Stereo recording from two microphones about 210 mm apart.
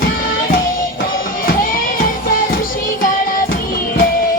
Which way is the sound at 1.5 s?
40° left (ahead or behind).